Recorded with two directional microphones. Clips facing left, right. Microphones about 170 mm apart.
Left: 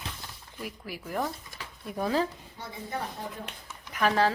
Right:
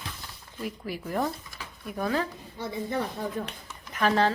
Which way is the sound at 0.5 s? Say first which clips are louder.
Right 5 dB; 5° left (ahead or behind).